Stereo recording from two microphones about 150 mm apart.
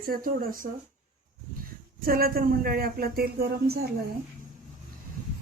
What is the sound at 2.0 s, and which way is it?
Speech, 75° right (ahead or behind).